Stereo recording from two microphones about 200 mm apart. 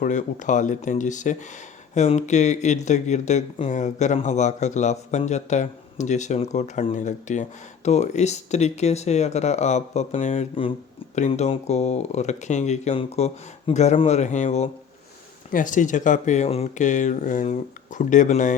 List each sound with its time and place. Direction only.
0.0 s speech: 40° left (ahead or behind)